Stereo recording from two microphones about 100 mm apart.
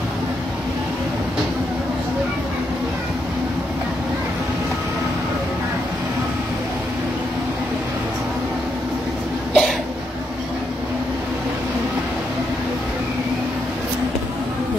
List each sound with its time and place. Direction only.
9.5 s cough: 5° left (ahead or behind)